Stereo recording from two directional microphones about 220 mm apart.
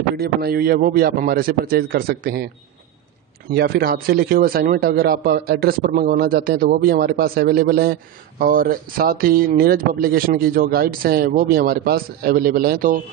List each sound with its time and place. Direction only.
0.2 s a man's voice: 45° right (ahead or behind)
3.5 s a man's voice: 45° right (ahead or behind)